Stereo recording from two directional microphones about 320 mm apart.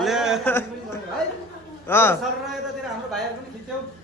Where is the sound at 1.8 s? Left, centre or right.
Centre.